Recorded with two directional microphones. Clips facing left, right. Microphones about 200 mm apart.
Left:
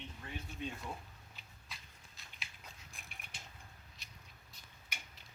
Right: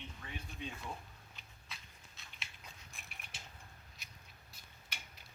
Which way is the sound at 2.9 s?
Centre (ahead or behind).